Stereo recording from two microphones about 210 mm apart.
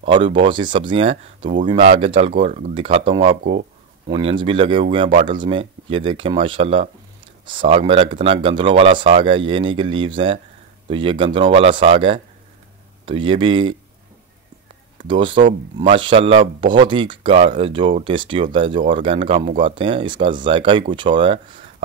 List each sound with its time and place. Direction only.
0.0 s speech: 25° right (ahead or behind)
15.0 s speech: 25° right (ahead or behind)